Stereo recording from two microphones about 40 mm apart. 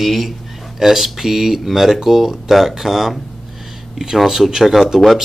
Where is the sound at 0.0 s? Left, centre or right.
Centre.